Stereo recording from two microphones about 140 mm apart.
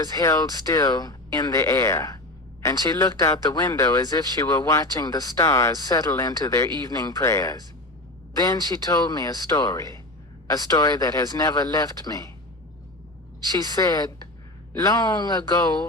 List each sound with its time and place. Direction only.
0.0 s speech: 25° left (ahead or behind)
13.7 s speech: 25° left (ahead or behind)